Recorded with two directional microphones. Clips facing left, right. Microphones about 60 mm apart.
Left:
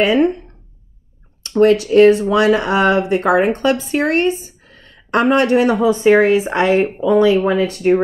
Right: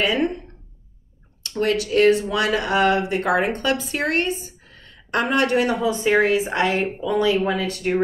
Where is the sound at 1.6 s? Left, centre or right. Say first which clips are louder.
Left 8 dB; left.